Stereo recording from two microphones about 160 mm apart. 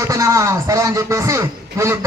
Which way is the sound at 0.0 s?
20° right (ahead or behind).